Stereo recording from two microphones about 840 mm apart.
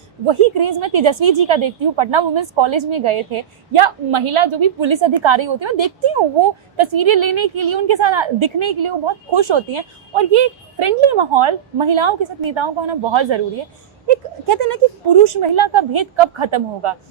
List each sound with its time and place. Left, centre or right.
0.3 s a woman's voice: right